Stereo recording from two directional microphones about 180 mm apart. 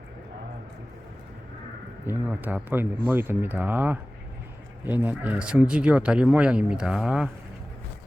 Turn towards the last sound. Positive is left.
turn(degrees=-5)  # may be behind; listen again after turning